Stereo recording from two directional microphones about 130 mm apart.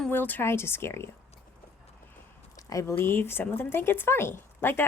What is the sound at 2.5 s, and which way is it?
Speech, 25° left (ahead or behind).